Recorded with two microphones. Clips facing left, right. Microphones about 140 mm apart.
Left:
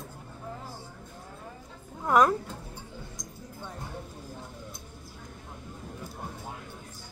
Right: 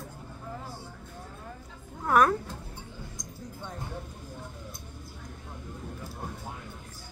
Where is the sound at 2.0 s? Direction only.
20° left (ahead or behind).